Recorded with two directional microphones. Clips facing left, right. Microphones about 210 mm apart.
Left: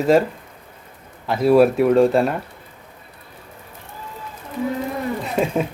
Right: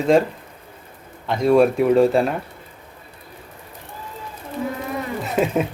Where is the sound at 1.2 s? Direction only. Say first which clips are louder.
Left 1 dB; 5° left (ahead or behind).